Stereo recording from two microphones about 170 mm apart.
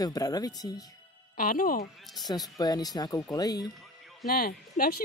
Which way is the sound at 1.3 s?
55° left (ahead or behind).